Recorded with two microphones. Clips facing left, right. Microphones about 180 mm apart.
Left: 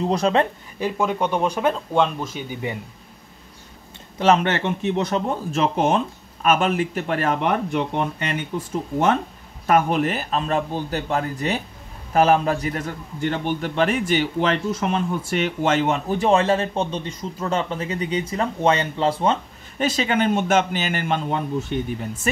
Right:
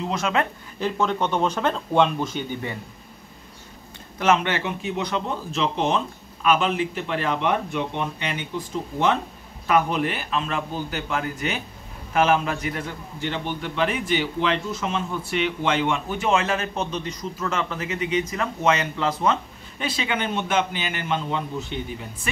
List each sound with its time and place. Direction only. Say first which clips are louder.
0.0 s speech: left 5 dB; 35° left (ahead or behind)
0.7 s speech: left 1 dB; 10° left (ahead or behind)
4.4 s speech: left 4 dB; 45° left (ahead or behind)
9.7 s speech: left 3 dB; 45° left (ahead or behind); by 19.3 s 30° left (ahead or behind)
19.8 s speech: left 6 dB; 45° left (ahead or behind)